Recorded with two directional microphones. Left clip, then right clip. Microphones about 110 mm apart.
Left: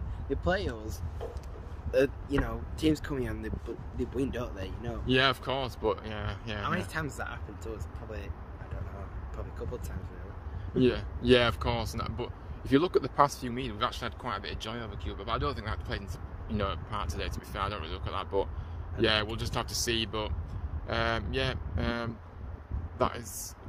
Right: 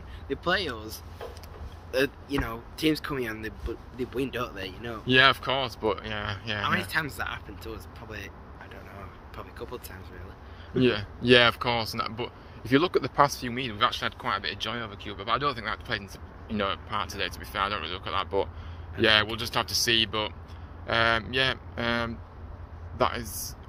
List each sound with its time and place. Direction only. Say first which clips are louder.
0.3 s speech: right 3 dB; 50° left (ahead or behind)
1.9 s speech: even; 70° left (ahead or behind); by 4.9 s 35° left (ahead or behind)
5.0 s speech: right 6 dB; 30° right (ahead or behind)
6.6 s speech: right 6 dB; 65° left (ahead or behind)
10.8 s speech: right 3 dB; 35° right (ahead or behind)